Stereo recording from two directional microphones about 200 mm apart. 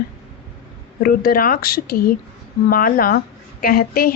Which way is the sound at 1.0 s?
50° left (ahead or behind).